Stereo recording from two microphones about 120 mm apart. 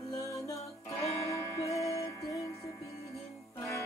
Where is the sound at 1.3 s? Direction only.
25° left (ahead or behind).